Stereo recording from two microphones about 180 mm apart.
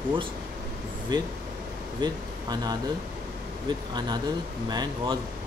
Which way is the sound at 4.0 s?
25° right (ahead or behind).